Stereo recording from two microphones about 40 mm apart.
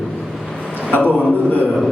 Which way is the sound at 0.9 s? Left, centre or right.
Left.